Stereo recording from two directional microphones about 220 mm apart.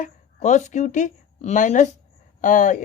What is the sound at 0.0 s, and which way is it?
Speech, 30° left (ahead or behind).